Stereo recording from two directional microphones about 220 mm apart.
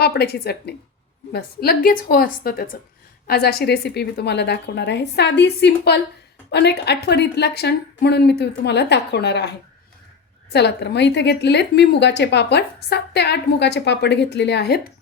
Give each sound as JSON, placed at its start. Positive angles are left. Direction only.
{"t": 0.0, "sound": "a woman's voice", "side_deg": 45}